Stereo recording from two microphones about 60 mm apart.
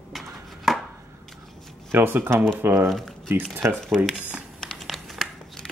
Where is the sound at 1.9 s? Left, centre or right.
Right.